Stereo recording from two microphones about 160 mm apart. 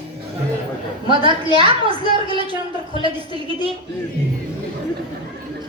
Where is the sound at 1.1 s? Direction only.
30° right (ahead or behind).